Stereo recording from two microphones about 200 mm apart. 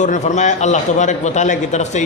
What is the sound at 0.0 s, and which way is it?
A man's voice, 35° left (ahead or behind).